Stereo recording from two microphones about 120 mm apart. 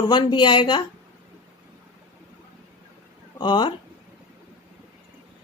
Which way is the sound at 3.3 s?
40° left (ahead or behind).